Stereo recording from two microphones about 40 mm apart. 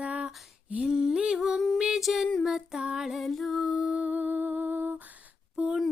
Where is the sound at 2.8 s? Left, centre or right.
Centre.